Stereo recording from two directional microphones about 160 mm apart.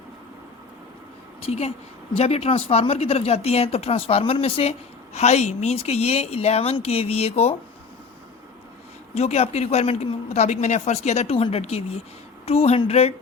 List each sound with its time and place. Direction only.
1.4 s a woman's voice: 40° left (ahead or behind)
9.1 s speech: 40° left (ahead or behind)